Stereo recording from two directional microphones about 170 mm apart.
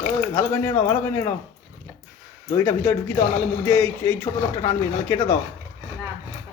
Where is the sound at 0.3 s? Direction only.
10° left (ahead or behind).